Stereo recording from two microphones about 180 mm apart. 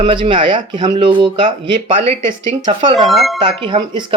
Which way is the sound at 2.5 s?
45° right (ahead or behind).